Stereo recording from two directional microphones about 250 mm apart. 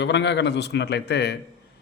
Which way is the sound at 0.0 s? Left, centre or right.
Left.